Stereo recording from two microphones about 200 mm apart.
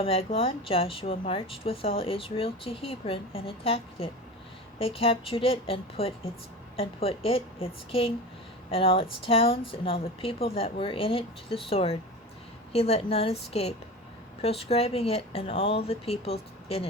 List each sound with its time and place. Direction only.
0.0 s speech: 30° left (ahead or behind)